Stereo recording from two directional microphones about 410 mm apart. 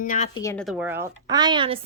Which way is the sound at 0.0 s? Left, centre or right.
Centre.